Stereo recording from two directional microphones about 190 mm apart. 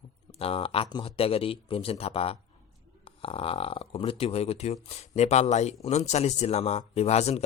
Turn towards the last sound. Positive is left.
turn(degrees=35)  # may be behind; listen again after turning